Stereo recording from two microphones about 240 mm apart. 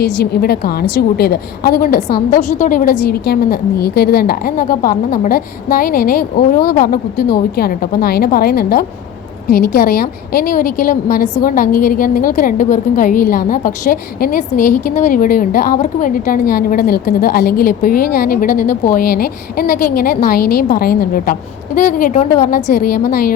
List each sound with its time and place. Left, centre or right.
0.4 s a woman's voice: left